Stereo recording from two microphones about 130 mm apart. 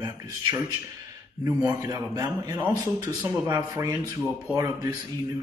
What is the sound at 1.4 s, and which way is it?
A man's voice, 20° right (ahead or behind).